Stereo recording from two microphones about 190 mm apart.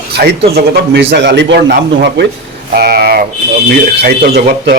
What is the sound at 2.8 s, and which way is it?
Speech, 55° right (ahead or behind).